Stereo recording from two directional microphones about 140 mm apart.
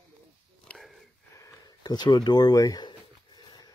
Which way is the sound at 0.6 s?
Centre (ahead or behind).